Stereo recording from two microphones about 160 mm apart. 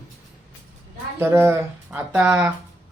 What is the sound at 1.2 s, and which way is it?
Speech, 15° right (ahead or behind).